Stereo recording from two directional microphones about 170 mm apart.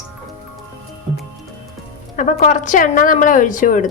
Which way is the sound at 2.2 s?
50° left (ahead or behind).